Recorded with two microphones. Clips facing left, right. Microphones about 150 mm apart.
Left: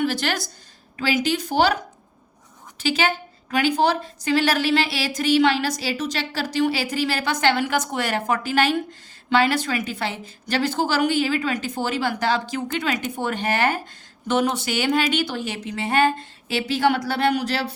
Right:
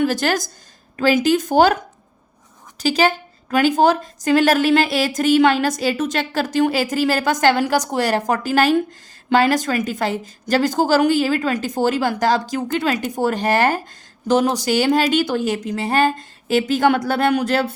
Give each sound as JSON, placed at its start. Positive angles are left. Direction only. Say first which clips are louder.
{"t": 0.0, "sound": "a woman's voice", "louder": "right 5 dB", "side_deg": -45}